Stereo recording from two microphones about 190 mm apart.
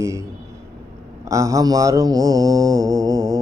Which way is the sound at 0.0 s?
15° right (ahead or behind).